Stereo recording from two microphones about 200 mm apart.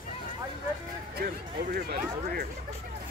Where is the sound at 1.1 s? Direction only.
50° right (ahead or behind).